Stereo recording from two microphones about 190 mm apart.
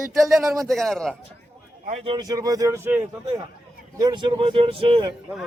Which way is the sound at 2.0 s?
25° right (ahead or behind).